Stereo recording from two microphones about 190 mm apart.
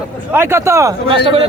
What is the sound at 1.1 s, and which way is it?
Speech, 30° right (ahead or behind).